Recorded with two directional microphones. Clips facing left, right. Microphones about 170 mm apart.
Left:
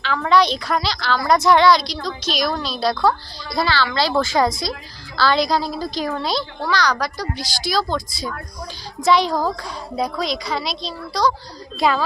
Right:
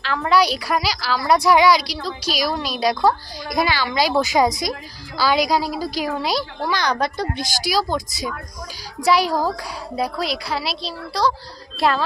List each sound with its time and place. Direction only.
0.0 s a woman's voice: centre (ahead or behind); by 7.4 s 25° right (ahead or behind)
7.7 s a woman's voice: 10° right (ahead or behind)